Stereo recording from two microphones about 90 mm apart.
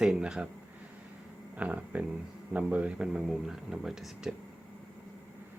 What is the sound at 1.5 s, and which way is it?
Speech, 15° right (ahead or behind).